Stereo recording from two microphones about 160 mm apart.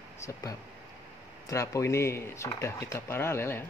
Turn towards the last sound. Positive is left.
turn(degrees=15)  # may be behind; listen again after turning